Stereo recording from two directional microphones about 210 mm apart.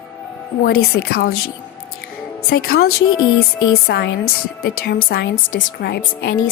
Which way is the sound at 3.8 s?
50° left (ahead or behind).